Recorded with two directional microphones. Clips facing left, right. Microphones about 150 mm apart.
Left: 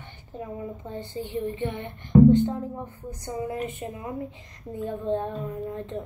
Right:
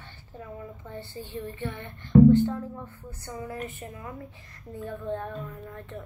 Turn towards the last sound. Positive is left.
turn(degrees=20)  # may be behind; listen again after turning